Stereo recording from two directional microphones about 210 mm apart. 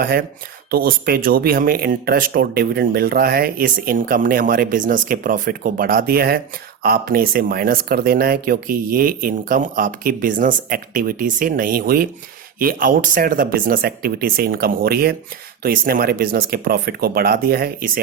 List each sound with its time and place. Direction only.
0.0 s speech: 45° right (ahead or behind)